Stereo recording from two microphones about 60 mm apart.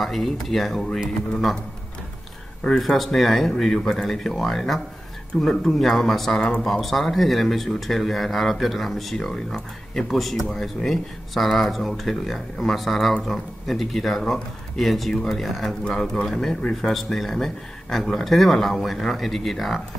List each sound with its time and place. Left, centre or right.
0.0 s speech: centre
2.8 s speech: centre